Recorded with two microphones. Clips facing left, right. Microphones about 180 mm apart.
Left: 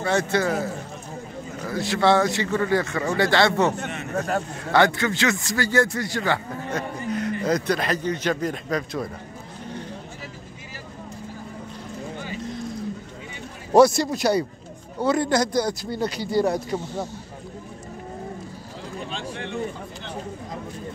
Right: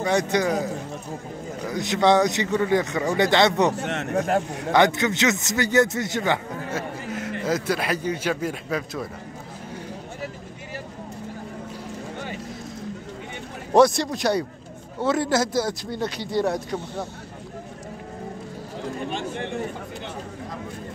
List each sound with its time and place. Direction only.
0.0 s a man's voice: 15° right (ahead or behind)
1.7 s a man's voice: 20° right (ahead or behind)
4.7 s a man's voice: 20° right (ahead or behind)
7.1 s a sound: 5° right (ahead or behind)
7.4 s a man's voice: 5° right (ahead or behind)
13.7 s speech: centre (ahead or behind)